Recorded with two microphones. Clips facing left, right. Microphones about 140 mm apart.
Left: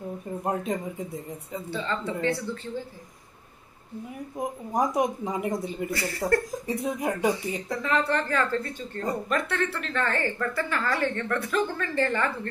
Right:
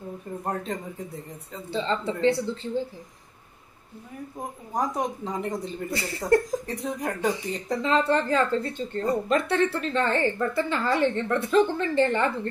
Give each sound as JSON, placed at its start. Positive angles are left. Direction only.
{"t": 0.5, "sound": "speech", "side_deg": 10}
{"t": 1.7, "sound": "a woman's voice", "side_deg": -25}
{"t": 4.7, "sound": "speech", "side_deg": 10}
{"t": 5.9, "sound": "a woman's voice", "side_deg": -20}
{"t": 6.7, "sound": "speech", "side_deg": 10}
{"t": 7.7, "sound": "a woman's voice", "side_deg": -25}